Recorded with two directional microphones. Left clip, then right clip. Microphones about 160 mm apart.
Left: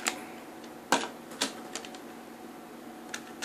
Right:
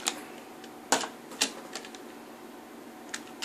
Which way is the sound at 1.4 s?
30° right (ahead or behind).